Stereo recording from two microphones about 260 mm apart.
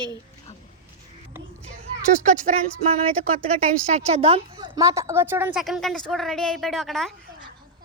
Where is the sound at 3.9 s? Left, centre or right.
Right.